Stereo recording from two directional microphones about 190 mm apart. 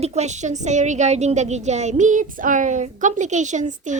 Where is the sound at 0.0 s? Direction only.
35° right (ahead or behind).